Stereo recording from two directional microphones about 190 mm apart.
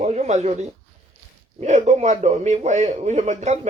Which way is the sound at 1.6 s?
35° right (ahead or behind).